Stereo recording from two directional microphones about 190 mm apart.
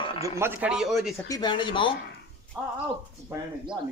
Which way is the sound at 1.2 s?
20° left (ahead or behind).